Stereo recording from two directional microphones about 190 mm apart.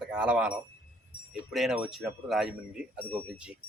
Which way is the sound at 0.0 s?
5° right (ahead or behind).